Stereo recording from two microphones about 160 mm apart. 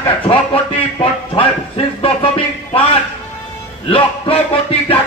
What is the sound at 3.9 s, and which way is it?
Music, 35° left (ahead or behind).